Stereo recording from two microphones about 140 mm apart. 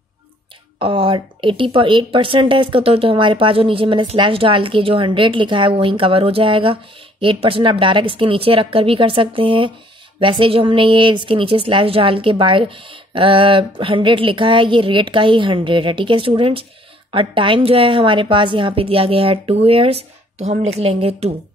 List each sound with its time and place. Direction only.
0.7 s speech: 40° right (ahead or behind)